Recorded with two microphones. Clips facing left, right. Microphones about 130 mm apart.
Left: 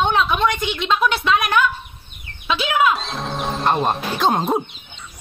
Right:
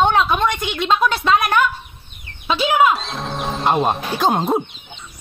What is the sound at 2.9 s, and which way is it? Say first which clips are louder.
Speech: right 1 dB; centre (ahead or behind).